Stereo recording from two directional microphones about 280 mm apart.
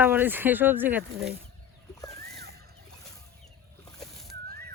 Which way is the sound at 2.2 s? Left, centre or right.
Right.